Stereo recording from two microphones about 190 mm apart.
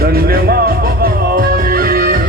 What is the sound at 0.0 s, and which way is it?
Music, 55° right (ahead or behind).